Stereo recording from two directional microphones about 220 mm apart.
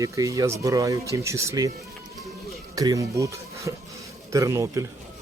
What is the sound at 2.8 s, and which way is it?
Speech, 15° right (ahead or behind).